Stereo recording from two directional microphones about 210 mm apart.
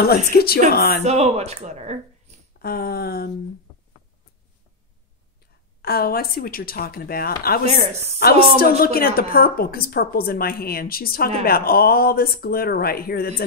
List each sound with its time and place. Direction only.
0.0 s a woman's voice: 45° left (ahead or behind)
1.0 s speech: 30° right (ahead or behind)
2.6 s a woman's voice: 45° left (ahead or behind)
5.8 s a woman's voice: 45° left (ahead or behind)
7.6 s speech: 30° right (ahead or behind)
8.2 s a woman's voice: 45° left (ahead or behind)